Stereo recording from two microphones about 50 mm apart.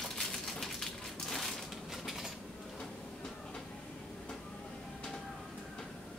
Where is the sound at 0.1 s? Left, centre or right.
Centre.